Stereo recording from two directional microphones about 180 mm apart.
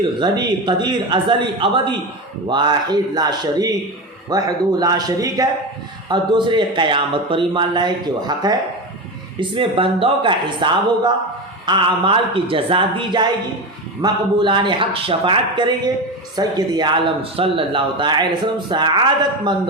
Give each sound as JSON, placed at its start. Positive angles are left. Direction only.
{"t": 0.0, "sound": "a man's voice", "side_deg": -25}